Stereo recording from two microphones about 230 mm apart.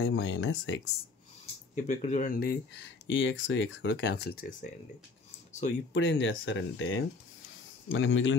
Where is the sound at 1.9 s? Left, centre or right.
Left.